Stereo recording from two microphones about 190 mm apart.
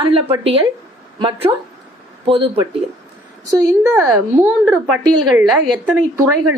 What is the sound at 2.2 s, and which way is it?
A woman's voice, 30° right (ahead or behind).